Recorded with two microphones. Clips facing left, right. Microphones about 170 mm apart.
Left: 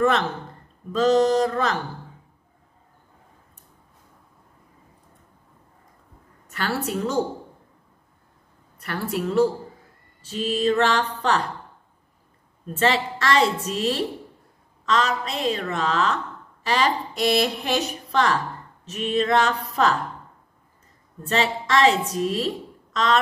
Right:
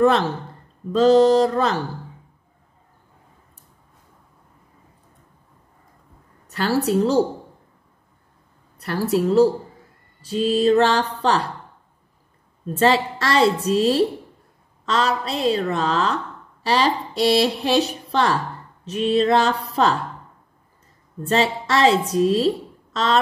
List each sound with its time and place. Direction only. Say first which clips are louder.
0.0 s speech: right 4 dB; 30° right (ahead or behind)
6.8 s speech: right 10 dB; 35° right (ahead or behind)
8.7 s a woman's voice: right 7 dB; 35° right (ahead or behind)
12.7 s speech: right 4 dB; 35° right (ahead or behind)
21.3 s speech: right 3 dB; 35° right (ahead or behind)